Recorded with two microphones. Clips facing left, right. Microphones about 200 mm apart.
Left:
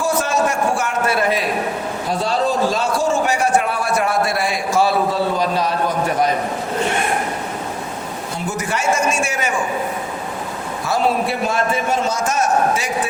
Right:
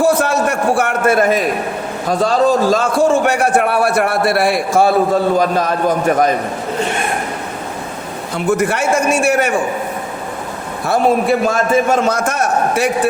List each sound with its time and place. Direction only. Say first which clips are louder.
0.0 s a sound: right 5 dB; 60° right (ahead or behind)
2.0 s a man's voice: right 7 dB; 45° right (ahead or behind)
8.4 s a man's voice: right 6 dB; 60° right (ahead or behind)
10.8 s a man's voice: right 6 dB; 50° right (ahead or behind)